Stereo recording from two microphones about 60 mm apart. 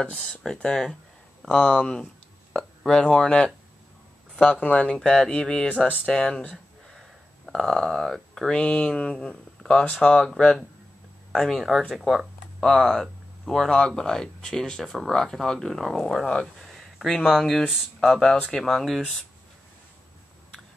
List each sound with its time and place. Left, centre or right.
0.0 s speech: centre
4.9 s speech: centre
7.0 s a sound: centre
8.4 s speech: centre